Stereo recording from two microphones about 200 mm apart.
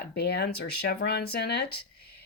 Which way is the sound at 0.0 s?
55° left (ahead or behind).